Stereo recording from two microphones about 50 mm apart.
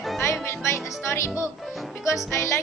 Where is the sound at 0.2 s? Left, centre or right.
Left.